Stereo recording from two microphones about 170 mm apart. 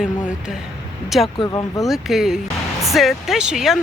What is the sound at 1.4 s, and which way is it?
Speech, 20° left (ahead or behind).